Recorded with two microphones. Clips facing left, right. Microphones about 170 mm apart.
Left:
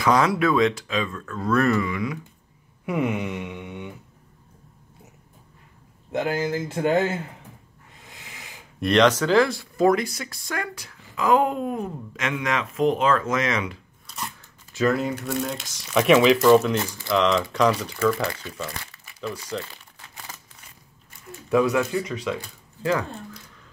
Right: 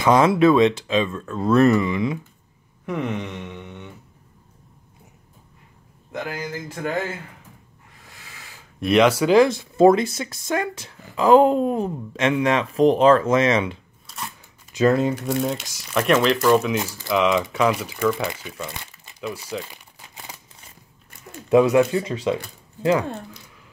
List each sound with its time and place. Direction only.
0.0 s speech: 25° right (ahead or behind)
2.9 s a sound: 10° left (ahead or behind)
6.1 s speech: 25° left (ahead or behind)
8.1 s a sound: 20° left (ahead or behind)
8.7 s speech: 5° right (ahead or behind); by 13.7 s 25° right (ahead or behind)
14.0 s scissors: centre (ahead or behind)
14.7 s speech: 20° right (ahead or behind)
15.8 s speech: centre (ahead or behind); by 18.5 s 20° right (ahead or behind)
18.7 s crumpling: 20° right (ahead or behind)
19.2 s crumpling: 5° right (ahead or behind)
21.5 s speech: 20° right (ahead or behind)